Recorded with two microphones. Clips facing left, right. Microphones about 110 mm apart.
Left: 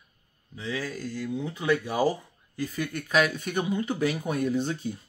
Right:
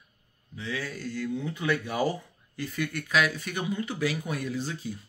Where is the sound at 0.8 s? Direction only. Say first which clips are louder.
Even; 10° left (ahead or behind).